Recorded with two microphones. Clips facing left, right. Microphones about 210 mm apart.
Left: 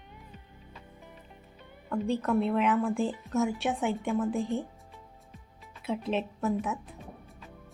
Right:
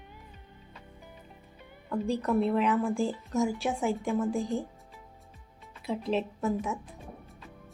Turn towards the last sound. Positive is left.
turn(degrees=0)  # may be behind; listen again after turning